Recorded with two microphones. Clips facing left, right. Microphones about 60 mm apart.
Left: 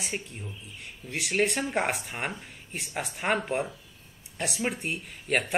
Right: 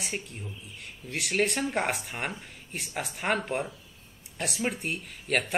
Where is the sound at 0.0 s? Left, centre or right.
Centre.